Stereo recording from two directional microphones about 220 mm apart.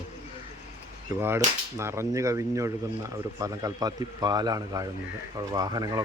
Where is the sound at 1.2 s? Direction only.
10° right (ahead or behind).